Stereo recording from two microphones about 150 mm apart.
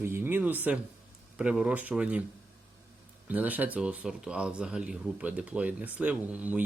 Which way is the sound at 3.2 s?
10° right (ahead or behind).